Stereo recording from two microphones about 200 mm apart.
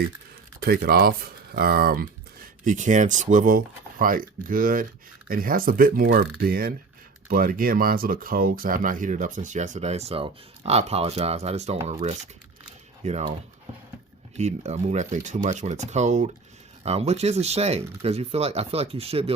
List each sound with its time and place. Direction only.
0.6 s speech: 50° right (ahead or behind); by 13.3 s 35° right (ahead or behind)
14.3 s speech: 35° right (ahead or behind)